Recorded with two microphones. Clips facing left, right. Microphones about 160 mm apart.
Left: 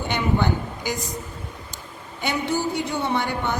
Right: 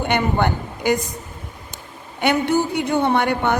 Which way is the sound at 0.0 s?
55° right (ahead or behind).